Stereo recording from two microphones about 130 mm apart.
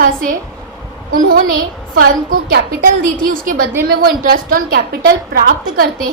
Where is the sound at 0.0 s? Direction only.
90° right.